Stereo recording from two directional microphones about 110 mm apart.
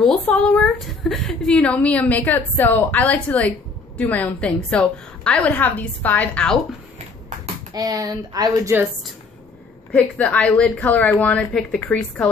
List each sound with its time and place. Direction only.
0.0 s a woman's voice: 5° left (ahead or behind)
7.7 s speech: 35° right (ahead or behind)
9.9 s a woman's voice: 10° left (ahead or behind)